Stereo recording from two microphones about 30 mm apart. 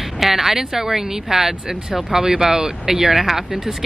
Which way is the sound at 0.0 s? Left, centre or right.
Centre.